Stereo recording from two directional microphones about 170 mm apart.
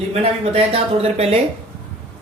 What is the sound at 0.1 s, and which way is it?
Speech, 35° right (ahead or behind).